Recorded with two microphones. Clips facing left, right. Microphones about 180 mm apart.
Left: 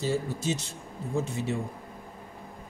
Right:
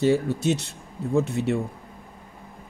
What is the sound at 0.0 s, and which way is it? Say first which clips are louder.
Speech: right 8 dB; 65° right (ahead or behind).